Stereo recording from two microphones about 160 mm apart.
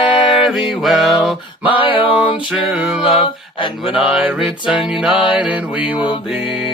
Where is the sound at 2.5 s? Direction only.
5° right (ahead or behind).